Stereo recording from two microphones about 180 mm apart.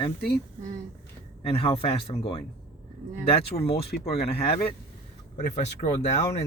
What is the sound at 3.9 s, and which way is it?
Speech, 50° left (ahead or behind).